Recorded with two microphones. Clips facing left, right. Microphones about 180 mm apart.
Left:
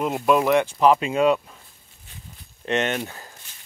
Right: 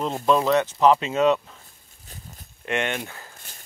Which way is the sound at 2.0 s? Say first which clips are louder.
Right 2 dB; 40° right (ahead or behind).